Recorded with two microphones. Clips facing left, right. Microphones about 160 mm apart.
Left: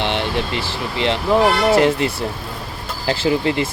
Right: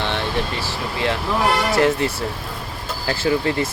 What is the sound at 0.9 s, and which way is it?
Speech, 20° left (ahead or behind).